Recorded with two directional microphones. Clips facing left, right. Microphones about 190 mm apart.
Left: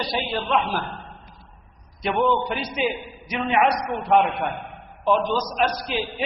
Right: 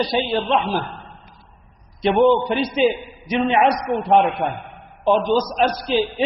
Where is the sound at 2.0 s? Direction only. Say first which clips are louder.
Right 6 dB; 30° right (ahead or behind).